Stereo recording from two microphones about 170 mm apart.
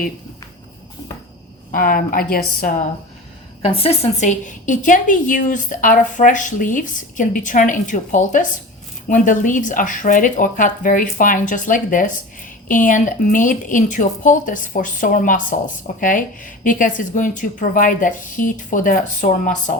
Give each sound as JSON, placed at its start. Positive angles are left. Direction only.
{"t": 1.7, "sound": "a woman's voice", "side_deg": 55}
{"t": 3.6, "sound": "speech", "side_deg": 35}